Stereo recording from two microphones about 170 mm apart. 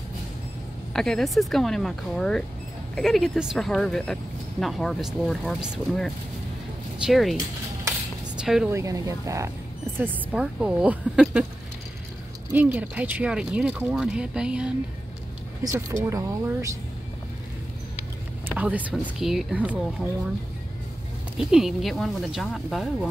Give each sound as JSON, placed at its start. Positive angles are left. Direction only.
{"t": 0.9, "sound": "speech", "side_deg": 5}
{"t": 8.4, "sound": "a woman's voice", "side_deg": -5}
{"t": 8.6, "sound": "speech", "side_deg": -20}
{"t": 9.9, "sound": "speech", "side_deg": -10}
{"t": 12.5, "sound": "speech", "side_deg": -10}
{"t": 15.6, "sound": "speech", "side_deg": -15}
{"t": 18.6, "sound": "speech", "side_deg": -10}
{"t": 21.4, "sound": "speech", "side_deg": -5}